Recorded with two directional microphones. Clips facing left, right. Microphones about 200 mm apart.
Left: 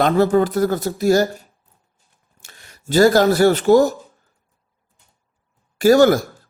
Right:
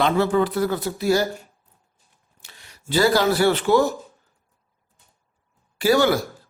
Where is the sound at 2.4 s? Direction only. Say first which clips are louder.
Left 2 dB; 45° left (ahead or behind).